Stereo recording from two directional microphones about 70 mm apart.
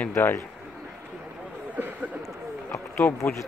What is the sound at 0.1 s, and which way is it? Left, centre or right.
Speech, left.